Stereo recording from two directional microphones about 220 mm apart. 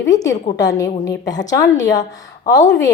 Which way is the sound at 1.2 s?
15° left (ahead or behind).